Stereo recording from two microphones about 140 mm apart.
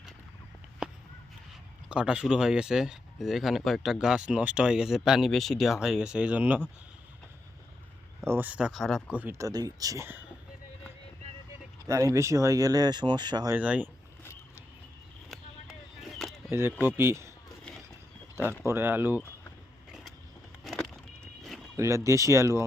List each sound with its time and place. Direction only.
0.8 s a sound: 5° right (ahead or behind)
1.9 s speech: 10° right (ahead or behind)
8.3 s speech: 10° right (ahead or behind)
9.1 s speech: 15° right (ahead or behind)
11.9 s speech: 20° right (ahead or behind)
13.5 s speech: 10° right (ahead or behind)
16.5 s speech: 15° right (ahead or behind)
18.6 s speech: 15° right (ahead or behind)
20.7 s vehicle: 5° left (ahead or behind)
21.4 s a sound: centre (ahead or behind)
21.8 s speech: 20° right (ahead or behind)